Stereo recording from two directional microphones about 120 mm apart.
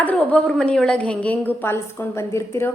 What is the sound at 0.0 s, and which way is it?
A woman's voice, 15° left (ahead or behind).